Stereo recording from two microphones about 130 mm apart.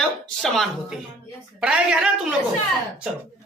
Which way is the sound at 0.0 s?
5° left (ahead or behind).